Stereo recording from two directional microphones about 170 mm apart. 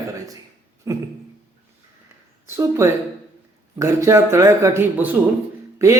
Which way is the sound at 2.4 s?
15° right (ahead or behind).